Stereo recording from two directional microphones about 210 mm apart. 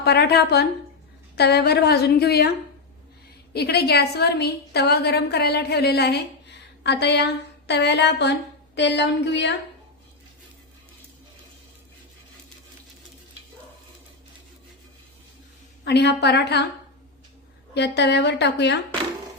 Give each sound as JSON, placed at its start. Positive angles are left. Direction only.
{"t": 0.0, "sound": "a woman's voice", "side_deg": 50}
{"t": 3.5, "sound": "a woman's voice", "side_deg": 50}
{"t": 15.8, "sound": "a woman's voice", "side_deg": 50}
{"t": 17.7, "sound": "a woman's voice", "side_deg": 55}